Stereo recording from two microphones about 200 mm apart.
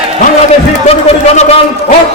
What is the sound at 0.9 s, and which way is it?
Music, 30° left (ahead or behind).